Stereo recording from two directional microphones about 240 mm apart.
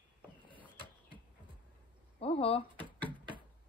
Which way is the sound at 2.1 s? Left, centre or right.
Left.